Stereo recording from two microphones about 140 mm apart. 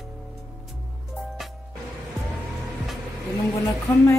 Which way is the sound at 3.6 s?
20° left (ahead or behind).